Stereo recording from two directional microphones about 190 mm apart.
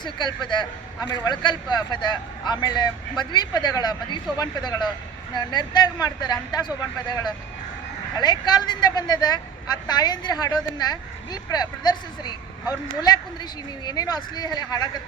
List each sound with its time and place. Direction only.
0.0 s a man's voice: 25° left (ahead or behind)
13.8 s a man's voice: 20° left (ahead or behind)